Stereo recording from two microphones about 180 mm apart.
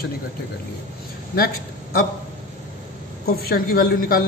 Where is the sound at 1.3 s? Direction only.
55° left (ahead or behind).